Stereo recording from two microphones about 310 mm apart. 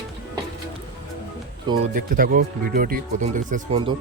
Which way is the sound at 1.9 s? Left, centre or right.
Right.